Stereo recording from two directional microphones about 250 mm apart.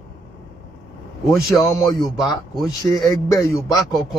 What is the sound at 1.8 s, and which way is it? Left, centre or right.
A man's voice, centre.